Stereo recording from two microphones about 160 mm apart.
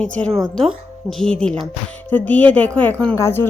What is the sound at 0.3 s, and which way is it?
Speech, 20° right (ahead or behind).